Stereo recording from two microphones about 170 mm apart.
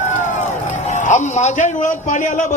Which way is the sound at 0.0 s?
45° left (ahead or behind).